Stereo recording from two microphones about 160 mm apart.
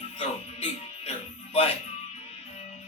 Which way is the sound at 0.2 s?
40° left (ahead or behind).